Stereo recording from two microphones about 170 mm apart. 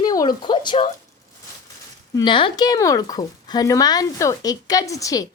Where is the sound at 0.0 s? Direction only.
25° left (ahead or behind).